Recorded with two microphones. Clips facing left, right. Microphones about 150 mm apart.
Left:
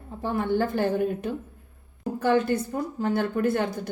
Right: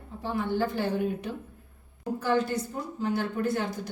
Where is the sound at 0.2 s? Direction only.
50° left (ahead or behind).